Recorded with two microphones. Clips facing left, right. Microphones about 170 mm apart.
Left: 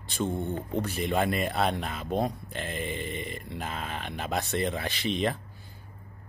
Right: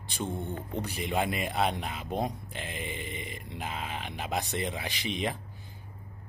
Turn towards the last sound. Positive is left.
turn(degrees=-15)  # may be behind; listen again after turning